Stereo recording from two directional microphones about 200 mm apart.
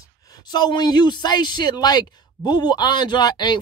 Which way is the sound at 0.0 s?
20° left (ahead or behind).